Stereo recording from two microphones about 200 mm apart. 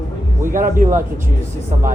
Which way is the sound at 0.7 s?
40° right (ahead or behind).